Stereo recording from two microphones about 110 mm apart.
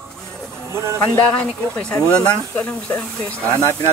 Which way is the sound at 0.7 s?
25° right (ahead or behind).